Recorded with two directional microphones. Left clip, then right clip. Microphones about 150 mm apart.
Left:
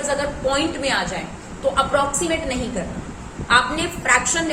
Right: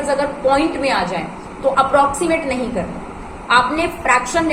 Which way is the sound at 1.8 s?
5° left (ahead or behind).